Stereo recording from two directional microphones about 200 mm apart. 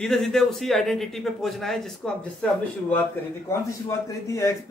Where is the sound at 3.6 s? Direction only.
15° left (ahead or behind).